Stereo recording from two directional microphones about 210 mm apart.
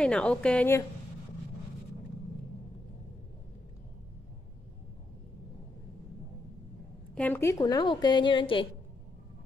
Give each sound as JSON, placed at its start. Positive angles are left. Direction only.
{"t": 0.0, "sound": "a woman's voice", "side_deg": 5}
{"t": 7.2, "sound": "a woman's voice", "side_deg": 10}